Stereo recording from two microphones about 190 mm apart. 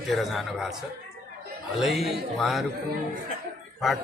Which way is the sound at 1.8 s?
Centre (ahead or behind).